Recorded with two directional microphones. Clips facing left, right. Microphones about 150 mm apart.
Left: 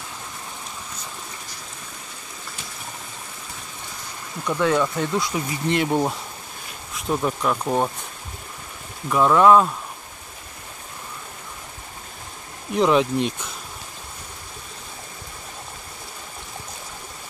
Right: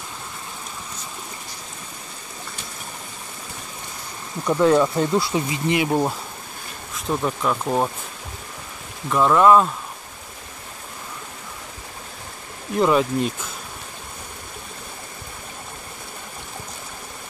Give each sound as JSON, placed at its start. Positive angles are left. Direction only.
{"t": 4.6, "sound": "speech", "side_deg": -35}
{"t": 5.7, "sound": "speech", "side_deg": -5}
{"t": 9.1, "sound": "speech", "side_deg": 0}
{"t": 12.7, "sound": "speech", "side_deg": 0}